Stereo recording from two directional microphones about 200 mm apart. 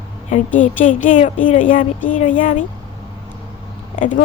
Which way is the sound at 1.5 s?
40° left (ahead or behind).